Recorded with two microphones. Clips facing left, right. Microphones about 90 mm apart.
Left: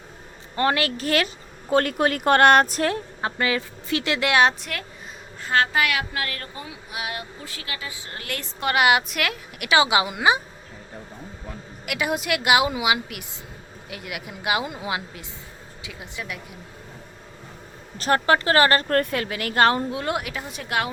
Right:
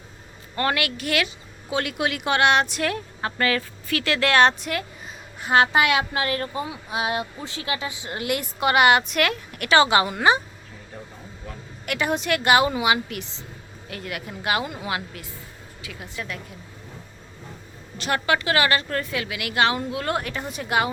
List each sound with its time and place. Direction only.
0.5 s a woman's voice: 25° left (ahead or behind)
4.6 s a woman's voice: 5° right (ahead or behind)
5.4 s speech: 15° right (ahead or behind)
8.6 s a woman's voice: centre (ahead or behind)
11.9 s a woman's voice: 5° left (ahead or behind)
17.9 s a woman's voice: 40° left (ahead or behind)
19.9 s a woman's voice: 20° left (ahead or behind); by 20.9 s centre (ahead or behind)